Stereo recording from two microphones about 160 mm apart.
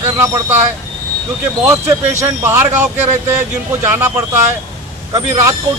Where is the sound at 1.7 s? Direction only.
15° right (ahead or behind).